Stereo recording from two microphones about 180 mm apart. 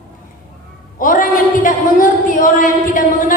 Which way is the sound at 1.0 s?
50° left (ahead or behind).